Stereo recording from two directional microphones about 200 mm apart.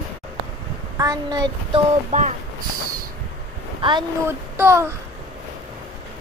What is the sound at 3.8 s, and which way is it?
Speech, 25° right (ahead or behind).